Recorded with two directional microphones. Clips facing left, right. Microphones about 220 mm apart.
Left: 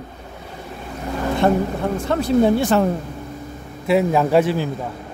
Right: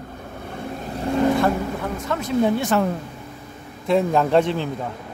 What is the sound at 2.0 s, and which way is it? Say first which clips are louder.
Speech: left 4 dB; 30° left (ahead or behind).